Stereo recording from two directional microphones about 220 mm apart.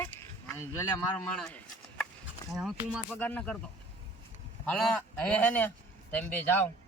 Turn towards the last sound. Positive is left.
turn(degrees=10)  # may be behind; listen again after turning